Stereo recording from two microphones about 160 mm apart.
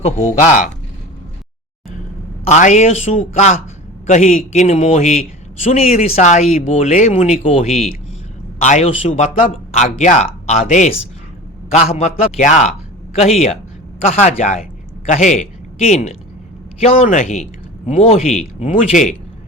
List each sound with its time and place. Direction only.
0.0 s a man's voice: 50° left (ahead or behind)
2.5 s a man's voice: 50° left (ahead or behind)